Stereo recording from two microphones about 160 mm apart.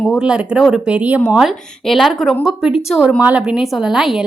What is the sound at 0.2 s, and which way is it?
A woman's voice, 5° right (ahead or behind).